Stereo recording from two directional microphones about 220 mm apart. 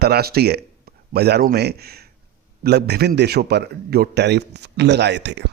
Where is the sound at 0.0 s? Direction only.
45° right (ahead or behind).